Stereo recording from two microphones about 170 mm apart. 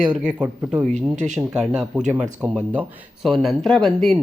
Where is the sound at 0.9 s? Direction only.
45° right (ahead or behind).